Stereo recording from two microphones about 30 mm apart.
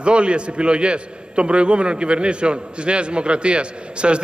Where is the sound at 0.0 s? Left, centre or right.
Right.